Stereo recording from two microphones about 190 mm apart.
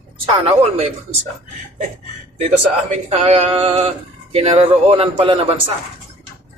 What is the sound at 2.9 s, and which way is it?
Speech, 35° right (ahead or behind).